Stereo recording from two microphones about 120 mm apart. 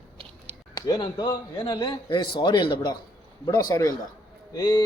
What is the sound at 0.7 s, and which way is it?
A man's voice, 35° left (ahead or behind).